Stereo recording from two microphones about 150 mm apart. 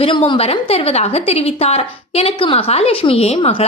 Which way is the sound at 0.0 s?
35° left (ahead or behind).